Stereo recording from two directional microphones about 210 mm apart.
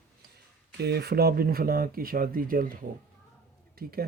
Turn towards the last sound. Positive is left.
turn(degrees=-45)  # may be behind; listen again after turning